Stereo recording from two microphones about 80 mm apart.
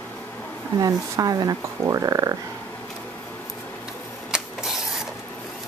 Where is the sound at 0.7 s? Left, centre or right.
Right.